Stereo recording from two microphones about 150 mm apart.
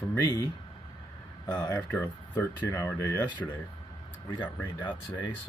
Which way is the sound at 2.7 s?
20° left (ahead or behind).